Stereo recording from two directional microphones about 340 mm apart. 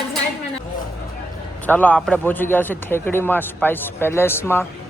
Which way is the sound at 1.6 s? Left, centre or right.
Centre.